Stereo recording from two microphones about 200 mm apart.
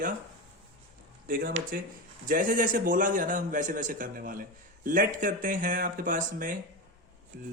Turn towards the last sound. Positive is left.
turn(degrees=-40)  # may be behind; listen again after turning